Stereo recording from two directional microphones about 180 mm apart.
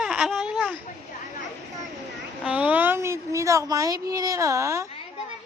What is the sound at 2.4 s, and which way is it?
A woman's voice, 5° right (ahead or behind).